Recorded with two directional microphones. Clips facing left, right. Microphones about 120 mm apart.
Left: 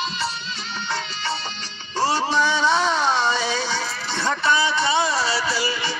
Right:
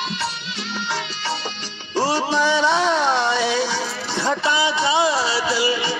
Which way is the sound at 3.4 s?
5° right (ahead or behind).